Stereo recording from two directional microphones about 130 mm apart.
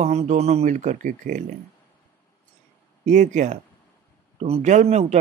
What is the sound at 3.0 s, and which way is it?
Speech, 70° right (ahead or behind).